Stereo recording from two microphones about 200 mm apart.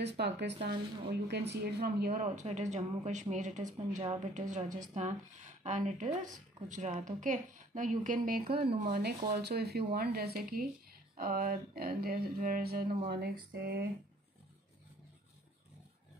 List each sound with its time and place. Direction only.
0.0 s a woman's voice: 60° right (ahead or behind)
2.2 s a woman's voice: 35° right (ahead or behind); by 13.8 s 50° right (ahead or behind)